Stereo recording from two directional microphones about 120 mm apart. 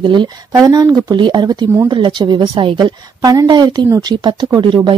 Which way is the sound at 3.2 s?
30° right (ahead or behind).